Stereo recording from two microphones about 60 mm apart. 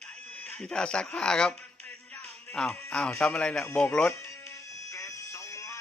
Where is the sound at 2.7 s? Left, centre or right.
Centre.